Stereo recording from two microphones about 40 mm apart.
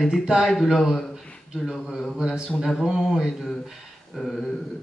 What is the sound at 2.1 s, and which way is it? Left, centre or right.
A man's voice, centre.